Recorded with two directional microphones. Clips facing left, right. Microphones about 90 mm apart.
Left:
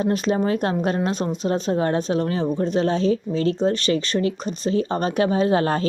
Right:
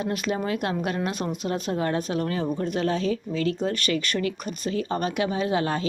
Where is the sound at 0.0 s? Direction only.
30° left (ahead or behind).